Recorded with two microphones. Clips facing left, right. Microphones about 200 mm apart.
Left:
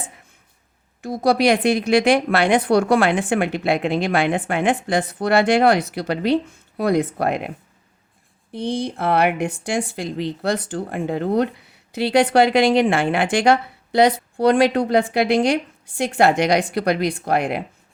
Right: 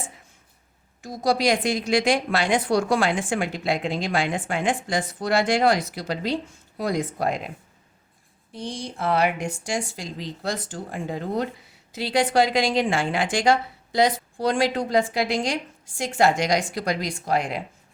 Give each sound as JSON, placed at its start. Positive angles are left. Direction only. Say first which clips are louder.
{"t": 1.0, "sound": "speech", "louder": "left 5 dB", "side_deg": 60}
{"t": 8.5, "sound": "speech", "louder": "left 8 dB", "side_deg": 60}